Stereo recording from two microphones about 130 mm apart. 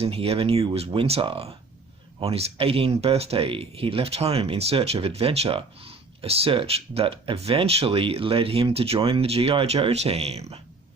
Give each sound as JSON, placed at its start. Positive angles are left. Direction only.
{"t": 0.0, "sound": "speech", "side_deg": -45}